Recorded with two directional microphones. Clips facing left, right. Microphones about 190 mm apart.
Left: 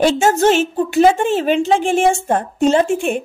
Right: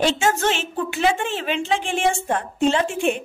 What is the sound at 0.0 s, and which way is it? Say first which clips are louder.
A woman's voice: left 7 dB; 40° left (ahead or behind).